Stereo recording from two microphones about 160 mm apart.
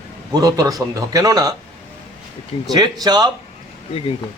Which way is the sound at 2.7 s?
25° right (ahead or behind).